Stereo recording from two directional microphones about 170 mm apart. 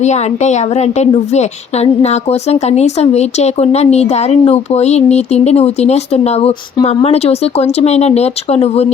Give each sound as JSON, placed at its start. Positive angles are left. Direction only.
{"t": 0.0, "sound": "a woman's voice", "side_deg": 45}